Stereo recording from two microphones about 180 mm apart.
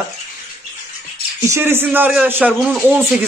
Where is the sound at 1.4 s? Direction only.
15° right (ahead or behind).